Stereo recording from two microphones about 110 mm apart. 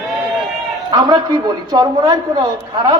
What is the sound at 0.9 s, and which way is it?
A woman's voice, 40° right (ahead or behind).